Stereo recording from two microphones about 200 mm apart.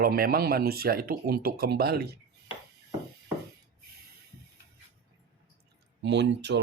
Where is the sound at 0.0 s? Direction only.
50° right (ahead or behind).